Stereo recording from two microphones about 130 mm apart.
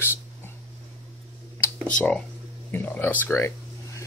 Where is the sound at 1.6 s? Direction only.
5° left (ahead or behind).